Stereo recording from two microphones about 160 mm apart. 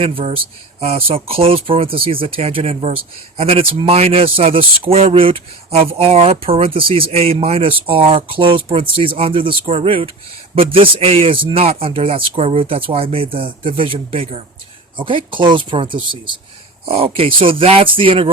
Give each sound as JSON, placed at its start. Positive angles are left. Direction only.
{"t": 0.0, "sound": "speech", "side_deg": -35}